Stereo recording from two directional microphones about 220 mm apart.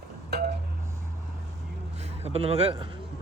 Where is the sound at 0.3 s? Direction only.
45° right (ahead or behind).